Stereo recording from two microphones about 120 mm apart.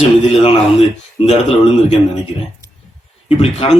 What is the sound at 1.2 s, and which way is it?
Speech, 60° left (ahead or behind).